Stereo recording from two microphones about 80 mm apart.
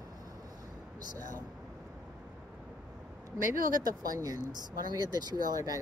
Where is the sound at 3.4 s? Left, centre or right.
Right.